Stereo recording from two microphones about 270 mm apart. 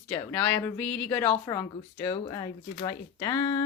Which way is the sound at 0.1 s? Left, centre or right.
Centre.